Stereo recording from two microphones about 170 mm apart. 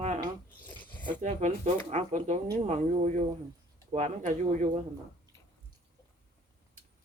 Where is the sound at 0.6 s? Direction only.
10° left (ahead or behind).